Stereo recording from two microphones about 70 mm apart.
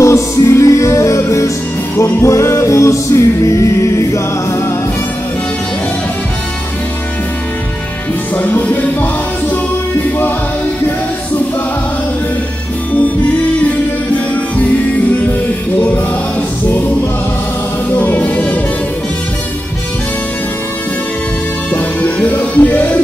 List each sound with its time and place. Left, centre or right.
0.0 s music: left
8.4 s music: left
17.9 s music: left
21.7 s music: left